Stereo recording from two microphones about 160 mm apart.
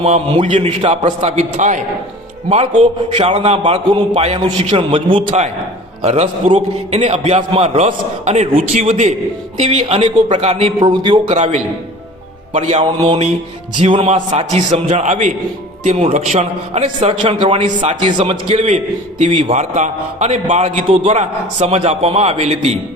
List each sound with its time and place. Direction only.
0.0 s a man's voice: 45° right (ahead or behind)
10.8 s a man's voice: 30° right (ahead or behind)
11.3 s a man's voice: 45° right (ahead or behind)
13.7 s a man's voice: 35° right (ahead or behind)